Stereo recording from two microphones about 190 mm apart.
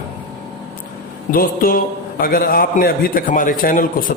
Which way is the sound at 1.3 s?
50° left (ahead or behind).